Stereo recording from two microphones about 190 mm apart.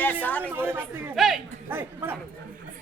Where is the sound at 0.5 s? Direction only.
10° right (ahead or behind).